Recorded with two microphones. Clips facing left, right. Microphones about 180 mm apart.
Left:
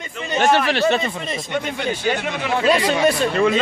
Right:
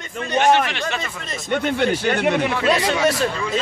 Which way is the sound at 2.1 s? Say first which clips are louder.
Right 7 dB; 55° right (ahead or behind).